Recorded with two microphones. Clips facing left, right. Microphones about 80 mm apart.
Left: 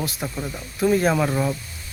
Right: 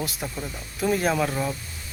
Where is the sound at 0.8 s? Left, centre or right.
Centre.